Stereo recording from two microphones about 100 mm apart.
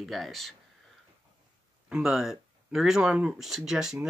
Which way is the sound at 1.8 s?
10° right (ahead or behind).